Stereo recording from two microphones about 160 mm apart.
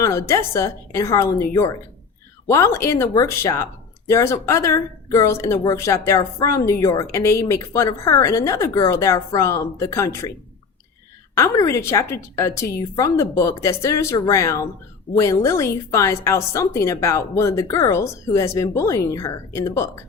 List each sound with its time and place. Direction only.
0.0 s a woman's voice: 20° left (ahead or behind)
11.3 s speech: 20° left (ahead or behind)